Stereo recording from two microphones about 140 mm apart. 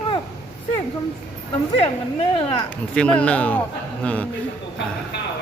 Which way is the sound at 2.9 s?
10° left (ahead or behind).